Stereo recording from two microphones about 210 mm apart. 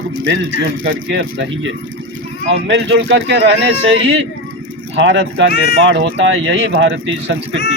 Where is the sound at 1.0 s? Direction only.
55° right (ahead or behind).